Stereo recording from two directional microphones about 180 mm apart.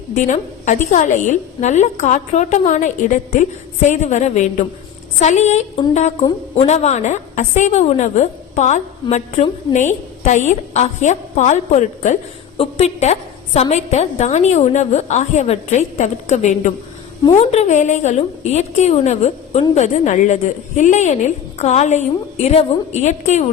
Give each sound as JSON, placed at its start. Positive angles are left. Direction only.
{"t": 0.1, "sound": "a woman's voice", "side_deg": 40}